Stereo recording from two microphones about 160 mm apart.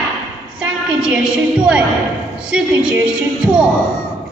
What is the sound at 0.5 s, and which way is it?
Music, 5° right (ahead or behind).